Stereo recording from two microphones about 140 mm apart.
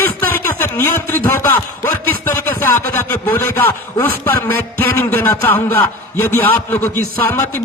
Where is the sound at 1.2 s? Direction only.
30° left (ahead or behind).